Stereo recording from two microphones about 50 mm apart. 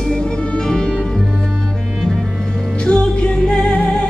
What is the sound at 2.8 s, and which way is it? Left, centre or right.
Music, centre.